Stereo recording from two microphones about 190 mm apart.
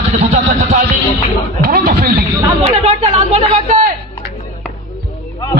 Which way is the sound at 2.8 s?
35° right (ahead or behind).